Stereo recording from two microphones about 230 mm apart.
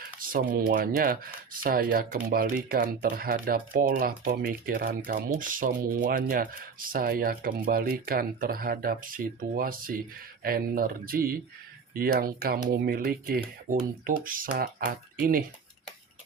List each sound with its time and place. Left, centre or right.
0.0 s speech: right